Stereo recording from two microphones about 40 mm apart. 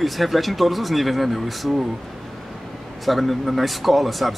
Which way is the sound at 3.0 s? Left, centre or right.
Centre.